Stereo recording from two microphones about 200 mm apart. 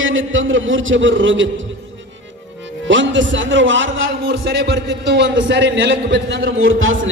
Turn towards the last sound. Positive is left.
turn(degrees=-80)